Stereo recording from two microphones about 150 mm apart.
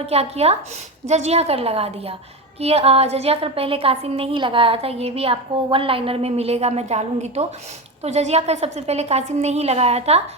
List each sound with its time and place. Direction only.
0.0 s a woman's voice: 45° right (ahead or behind)